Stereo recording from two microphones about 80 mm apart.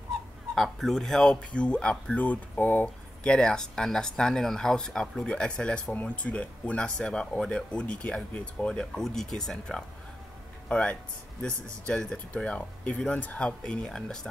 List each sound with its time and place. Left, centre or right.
0.6 s speech: centre; by 2.9 s left
3.3 s speech: centre